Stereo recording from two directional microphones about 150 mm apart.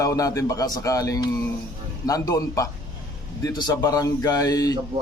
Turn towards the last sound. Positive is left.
turn(degrees=25)  # may be behind; listen again after turning